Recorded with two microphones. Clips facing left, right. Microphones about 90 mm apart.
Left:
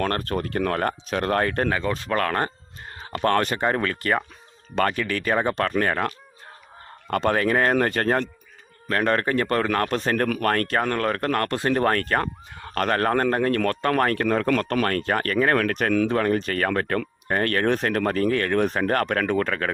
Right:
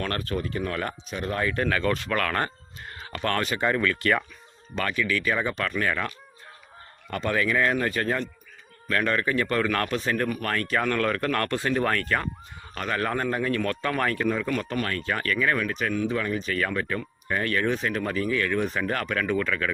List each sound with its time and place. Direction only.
0.0 s speech: 45° left (ahead or behind)
1.1 s speech: 60° left (ahead or behind)
1.7 s speech: 25° left (ahead or behind)
2.9 s a sound: 30° left (ahead or behind)
3.2 s speech: 45° left (ahead or behind)
7.3 s speech: 45° left (ahead or behind)
8.9 s speech: 40° left (ahead or behind)
10.0 s speech: 50° left (ahead or behind)
10.8 s speech: 35° left (ahead or behind)
12.6 s speech: 60° left (ahead or behind)
15.5 s speech: 65° left (ahead or behind)
16.1 s speech: 55° left (ahead or behind)